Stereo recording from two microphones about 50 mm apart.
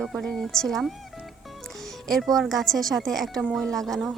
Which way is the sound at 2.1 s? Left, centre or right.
Centre.